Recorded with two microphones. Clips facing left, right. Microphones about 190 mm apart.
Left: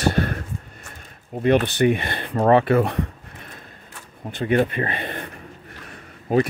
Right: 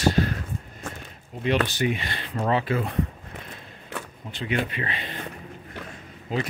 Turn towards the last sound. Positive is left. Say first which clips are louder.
# left 9 dB
turn(degrees=55)  # may be behind; listen again after turning